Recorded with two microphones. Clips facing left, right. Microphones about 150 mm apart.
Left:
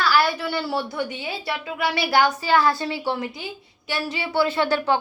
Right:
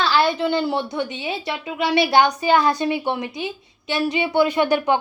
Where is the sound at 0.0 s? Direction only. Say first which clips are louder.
Right 2 dB; 25° right (ahead or behind).